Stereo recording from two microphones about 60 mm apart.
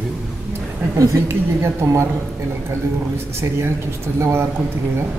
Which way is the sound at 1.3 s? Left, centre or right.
Right.